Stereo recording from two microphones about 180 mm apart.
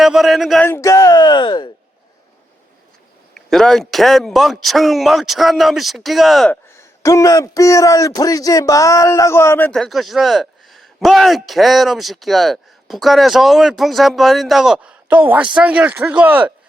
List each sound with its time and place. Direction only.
0.0 s speech: centre (ahead or behind)
0.7 s speech: 15° left (ahead or behind)
3.3 s speech: centre (ahead or behind)
6.7 s speech: 15° left (ahead or behind); by 16.5 s 10° right (ahead or behind)